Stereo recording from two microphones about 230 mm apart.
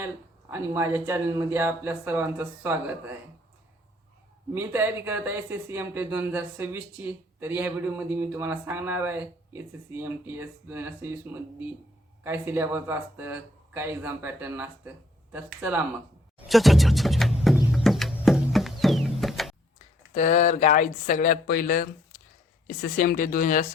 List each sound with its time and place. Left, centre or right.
0.5 s speech: centre
4.5 s speech: centre
12.2 s speech: centre
16.4 s music: centre
20.1 s speech: left